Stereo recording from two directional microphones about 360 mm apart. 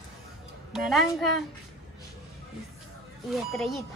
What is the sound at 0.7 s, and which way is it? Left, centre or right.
Speech, centre.